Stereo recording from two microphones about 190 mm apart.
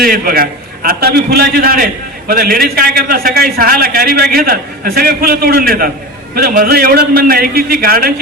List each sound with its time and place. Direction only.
0.0 s a man's voice: 50° right (ahead or behind)